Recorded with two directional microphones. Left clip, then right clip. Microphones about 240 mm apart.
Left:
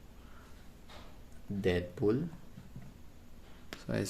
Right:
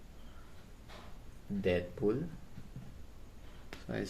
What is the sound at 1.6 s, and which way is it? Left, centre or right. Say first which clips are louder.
Speech: left 1 dB; left.